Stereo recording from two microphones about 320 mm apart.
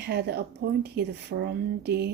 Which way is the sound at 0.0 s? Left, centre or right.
Right.